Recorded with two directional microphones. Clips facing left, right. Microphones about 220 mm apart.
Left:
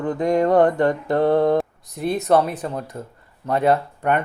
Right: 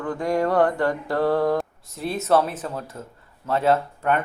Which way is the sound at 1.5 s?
Centre (ahead or behind).